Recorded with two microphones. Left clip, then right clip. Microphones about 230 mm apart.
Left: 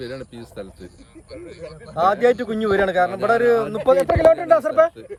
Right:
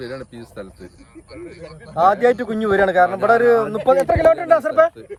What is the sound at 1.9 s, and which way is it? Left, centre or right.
Speech, centre.